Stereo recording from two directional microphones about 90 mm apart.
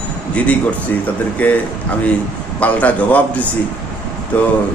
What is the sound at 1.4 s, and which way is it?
Speech, 15° left (ahead or behind).